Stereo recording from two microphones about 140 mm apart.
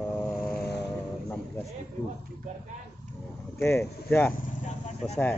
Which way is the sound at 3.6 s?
20° left (ahead or behind).